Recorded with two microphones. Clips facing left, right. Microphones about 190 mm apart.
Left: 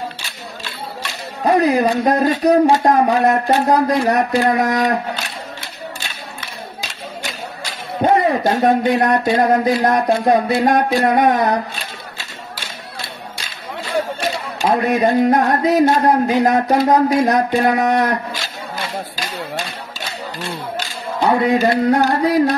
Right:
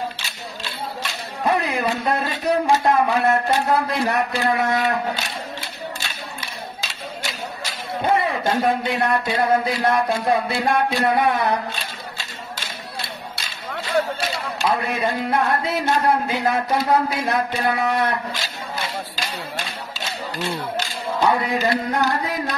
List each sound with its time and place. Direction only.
1.5 s a man's voice: 40° left (ahead or behind)
8.0 s speech: 40° left (ahead or behind)
14.6 s a man's voice: 40° left (ahead or behind)
21.5 s a man's voice: 40° left (ahead or behind)